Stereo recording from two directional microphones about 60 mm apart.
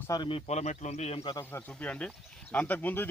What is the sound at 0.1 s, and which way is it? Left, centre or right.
Speech, left.